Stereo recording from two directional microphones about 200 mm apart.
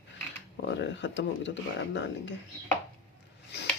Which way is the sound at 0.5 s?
65° left (ahead or behind).